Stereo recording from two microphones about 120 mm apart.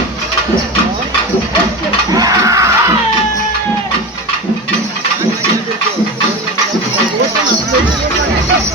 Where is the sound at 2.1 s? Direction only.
30° right (ahead or behind).